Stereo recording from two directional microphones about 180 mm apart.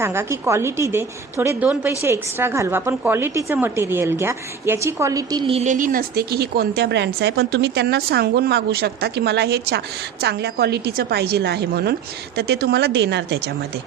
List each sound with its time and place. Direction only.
0.0 s a woman's voice: 15° right (ahead or behind)
5.5 s a woman's voice: 40° right (ahead or behind); by 13.5 s 70° right (ahead or behind)